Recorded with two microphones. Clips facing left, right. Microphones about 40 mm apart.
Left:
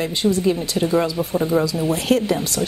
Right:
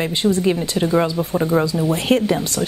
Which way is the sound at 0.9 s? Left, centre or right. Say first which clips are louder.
Right 2 dB; centre.